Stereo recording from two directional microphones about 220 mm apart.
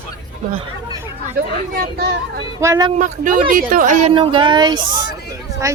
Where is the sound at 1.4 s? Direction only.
40° right (ahead or behind).